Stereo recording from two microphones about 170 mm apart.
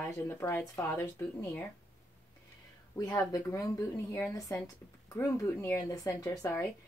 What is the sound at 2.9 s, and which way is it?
Speech, 20° left (ahead or behind).